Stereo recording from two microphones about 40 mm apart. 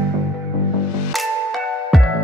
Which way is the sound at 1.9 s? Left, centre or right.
Centre.